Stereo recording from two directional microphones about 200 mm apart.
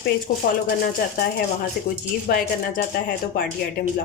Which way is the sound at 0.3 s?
40° left (ahead or behind).